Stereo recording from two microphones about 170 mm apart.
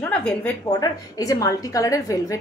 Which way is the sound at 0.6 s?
20° left (ahead or behind).